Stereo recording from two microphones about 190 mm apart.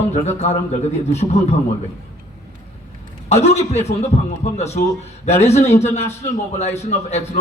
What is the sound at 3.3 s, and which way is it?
A man's voice, 35° left (ahead or behind).